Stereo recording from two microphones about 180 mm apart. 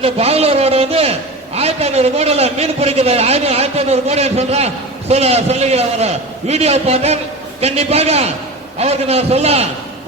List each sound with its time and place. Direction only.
0.0 s a man's voice: 35° right (ahead or behind)